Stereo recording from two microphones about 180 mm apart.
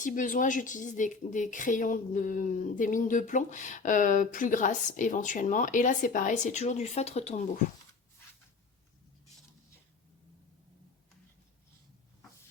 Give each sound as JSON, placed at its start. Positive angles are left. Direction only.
{"t": 0.0, "sound": "speech", "side_deg": 45}